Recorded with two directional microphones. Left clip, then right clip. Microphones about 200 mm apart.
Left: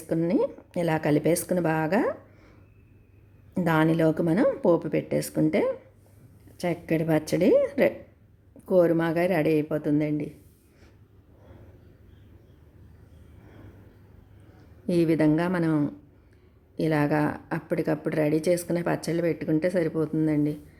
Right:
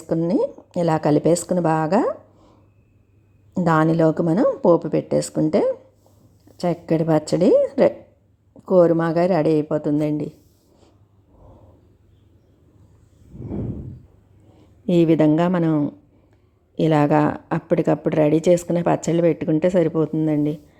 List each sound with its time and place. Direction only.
0.1 s a woman's voice: 20° right (ahead or behind)
3.6 s a woman's voice: 20° right (ahead or behind)
14.8 s a woman's voice: 30° right (ahead or behind)
16.7 s a woman's voice: 35° right (ahead or behind)